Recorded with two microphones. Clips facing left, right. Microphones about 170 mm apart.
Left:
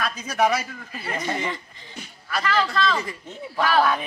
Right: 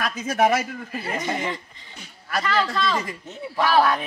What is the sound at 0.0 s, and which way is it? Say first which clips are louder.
Speech: right 1 dB; 50° right (ahead or behind).